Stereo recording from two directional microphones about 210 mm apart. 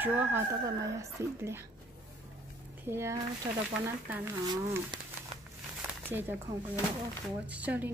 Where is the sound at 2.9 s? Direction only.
15° right (ahead or behind).